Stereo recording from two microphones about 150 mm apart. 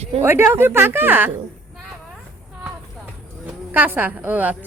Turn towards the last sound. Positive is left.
turn(degrees=-10)  # may be behind; listen again after turning